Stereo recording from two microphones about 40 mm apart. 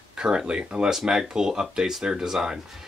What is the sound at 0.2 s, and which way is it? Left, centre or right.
Speech, right.